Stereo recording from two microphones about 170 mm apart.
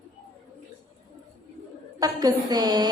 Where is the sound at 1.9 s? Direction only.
20° right (ahead or behind).